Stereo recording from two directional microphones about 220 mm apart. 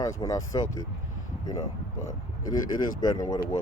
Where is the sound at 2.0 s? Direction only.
20° left (ahead or behind).